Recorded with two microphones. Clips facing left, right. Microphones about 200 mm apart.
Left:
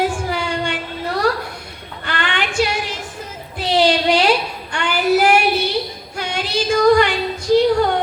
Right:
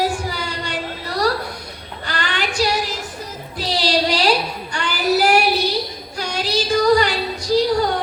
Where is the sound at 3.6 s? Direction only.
35° right (ahead or behind).